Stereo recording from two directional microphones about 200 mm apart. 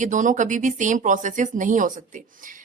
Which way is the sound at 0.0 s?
40° right (ahead or behind).